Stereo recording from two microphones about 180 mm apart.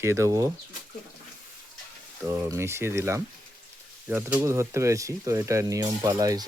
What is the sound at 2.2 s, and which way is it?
Speech, 10° right (ahead or behind).